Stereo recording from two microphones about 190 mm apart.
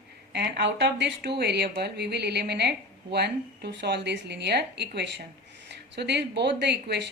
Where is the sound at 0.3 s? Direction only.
60° right (ahead or behind).